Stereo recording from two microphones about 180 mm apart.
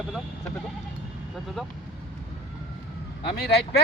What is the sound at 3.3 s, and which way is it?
Speech, 65° left (ahead or behind).